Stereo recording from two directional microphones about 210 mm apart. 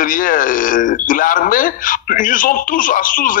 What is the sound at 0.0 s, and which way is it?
A man's voice, 40° left (ahead or behind).